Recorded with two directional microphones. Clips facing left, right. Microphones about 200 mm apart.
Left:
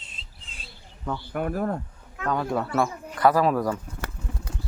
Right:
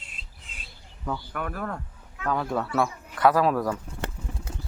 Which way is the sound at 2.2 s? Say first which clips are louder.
Left 1 dB; centre (ahead or behind).